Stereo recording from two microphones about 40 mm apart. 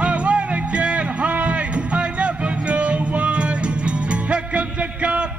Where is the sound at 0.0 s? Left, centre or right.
Right.